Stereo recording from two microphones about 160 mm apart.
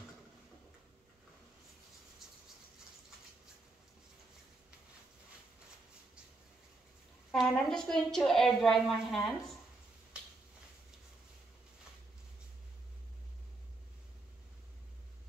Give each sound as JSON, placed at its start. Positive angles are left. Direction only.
{"t": 7.3, "sound": "a woman's voice", "side_deg": 5}